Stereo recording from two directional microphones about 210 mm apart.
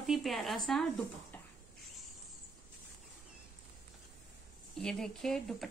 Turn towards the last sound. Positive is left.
turn(degrees=0)  # may be behind; listen again after turning